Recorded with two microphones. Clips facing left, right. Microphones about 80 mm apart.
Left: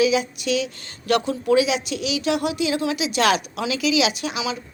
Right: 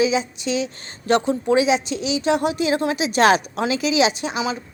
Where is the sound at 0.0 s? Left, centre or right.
Right.